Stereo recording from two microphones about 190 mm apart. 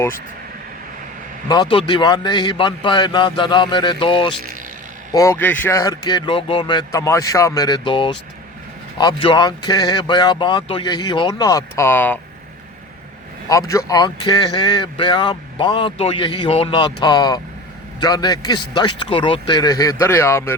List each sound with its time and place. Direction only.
1.5 s speech: 25° left (ahead or behind)
5.1 s speech: 15° left (ahead or behind)
13.5 s speech: 15° left (ahead or behind)